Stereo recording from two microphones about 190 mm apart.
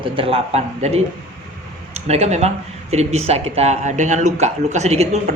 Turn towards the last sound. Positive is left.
turn(degrees=-35)  # may be behind; listen again after turning